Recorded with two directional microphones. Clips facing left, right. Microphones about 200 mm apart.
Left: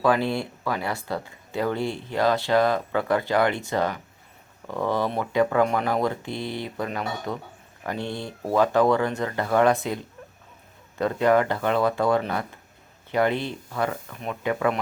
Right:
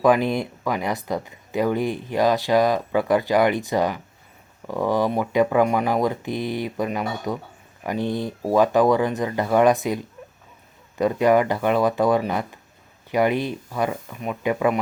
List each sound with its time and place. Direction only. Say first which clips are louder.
0.0 s speech: right 4 dB; 15° right (ahead or behind)